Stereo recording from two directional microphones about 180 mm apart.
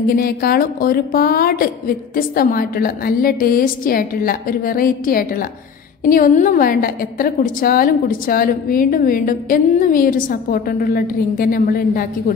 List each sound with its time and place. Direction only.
0.0 s a woman's voice: 55° left (ahead or behind)